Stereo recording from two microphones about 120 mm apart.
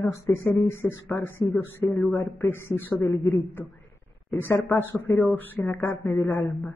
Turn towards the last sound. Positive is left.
turn(degrees=15)  # may be behind; listen again after turning